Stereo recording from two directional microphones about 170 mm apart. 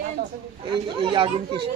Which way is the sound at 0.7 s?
30° right (ahead or behind).